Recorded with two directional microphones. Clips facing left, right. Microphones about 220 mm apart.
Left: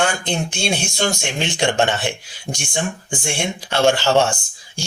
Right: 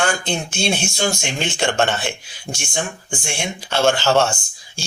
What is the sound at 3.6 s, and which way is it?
Speech, 15° left (ahead or behind).